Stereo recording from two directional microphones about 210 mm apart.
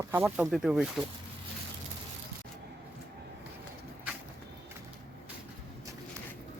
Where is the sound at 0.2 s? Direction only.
5° right (ahead or behind).